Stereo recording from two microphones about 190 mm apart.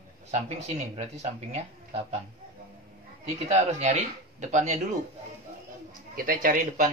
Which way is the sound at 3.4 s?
35° right (ahead or behind).